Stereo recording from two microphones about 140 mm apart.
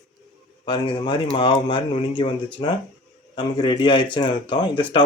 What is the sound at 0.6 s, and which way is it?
Speech, 35° left (ahead or behind).